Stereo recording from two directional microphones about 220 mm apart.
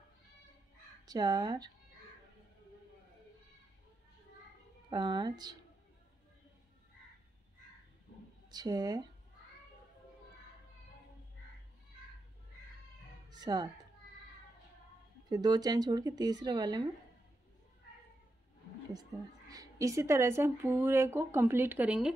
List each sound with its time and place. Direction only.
1.0 s speech: 20° right (ahead or behind)
4.8 s speech: 20° right (ahead or behind)
8.5 s speech: 20° right (ahead or behind)
13.3 s a sound: 20° right (ahead or behind)
15.2 s speech: 20° right (ahead or behind)
19.1 s speech: 15° right (ahead or behind)